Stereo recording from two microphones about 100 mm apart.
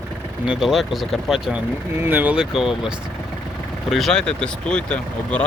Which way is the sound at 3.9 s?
5° left (ahead or behind).